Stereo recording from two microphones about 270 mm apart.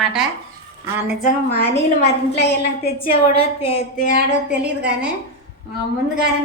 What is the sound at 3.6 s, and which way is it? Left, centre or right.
Speech, left.